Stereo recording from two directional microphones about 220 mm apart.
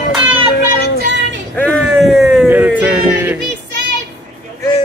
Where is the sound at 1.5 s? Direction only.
5° left (ahead or behind).